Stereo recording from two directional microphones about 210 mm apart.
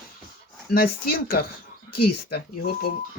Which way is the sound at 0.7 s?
45° left (ahead or behind).